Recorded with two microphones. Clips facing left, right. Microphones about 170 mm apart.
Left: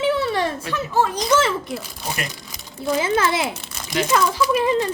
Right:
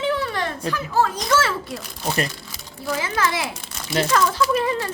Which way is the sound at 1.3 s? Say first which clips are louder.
Left 2 dB; 20° left (ahead or behind).